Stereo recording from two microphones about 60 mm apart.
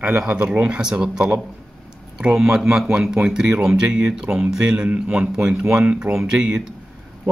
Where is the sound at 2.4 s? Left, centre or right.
Centre.